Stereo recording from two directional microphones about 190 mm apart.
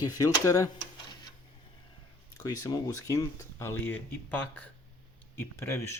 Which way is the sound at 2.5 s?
20° left (ahead or behind).